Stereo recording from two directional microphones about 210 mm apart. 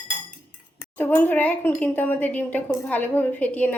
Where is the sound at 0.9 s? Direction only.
10° left (ahead or behind).